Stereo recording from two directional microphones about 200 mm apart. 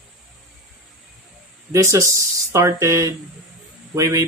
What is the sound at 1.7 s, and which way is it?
Speech, 15° right (ahead or behind).